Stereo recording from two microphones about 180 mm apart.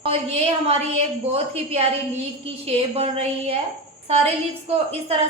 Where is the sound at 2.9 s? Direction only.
35° right (ahead or behind).